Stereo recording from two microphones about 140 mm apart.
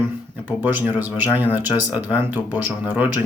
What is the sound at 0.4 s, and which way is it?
Speech, 15° right (ahead or behind).